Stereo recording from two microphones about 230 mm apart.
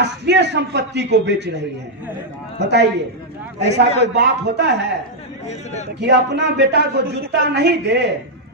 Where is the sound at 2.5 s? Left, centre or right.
Right.